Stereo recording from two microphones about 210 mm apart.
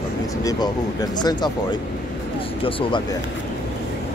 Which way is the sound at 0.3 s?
15° left (ahead or behind).